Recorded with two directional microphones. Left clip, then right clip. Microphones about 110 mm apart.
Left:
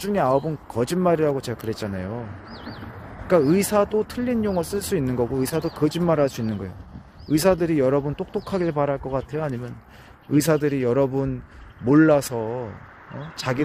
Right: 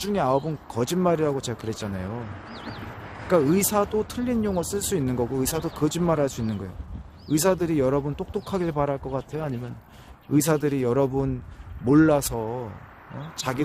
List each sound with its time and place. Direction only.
0.0 s speech: 10° left (ahead or behind)
2.8 s a sound: 20° left (ahead or behind)
3.5 s speech: centre (ahead or behind)
10.3 s speech: centre (ahead or behind)